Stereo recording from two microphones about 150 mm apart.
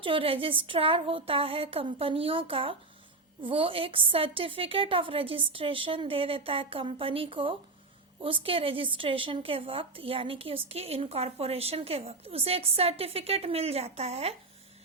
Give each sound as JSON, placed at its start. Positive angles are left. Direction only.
{"t": 0.0, "sound": "a woman's voice", "side_deg": -35}